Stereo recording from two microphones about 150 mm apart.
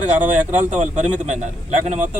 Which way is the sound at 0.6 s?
55° right (ahead or behind).